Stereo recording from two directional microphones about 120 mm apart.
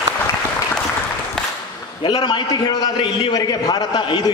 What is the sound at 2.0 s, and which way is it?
A man's voice, 35° left (ahead or behind).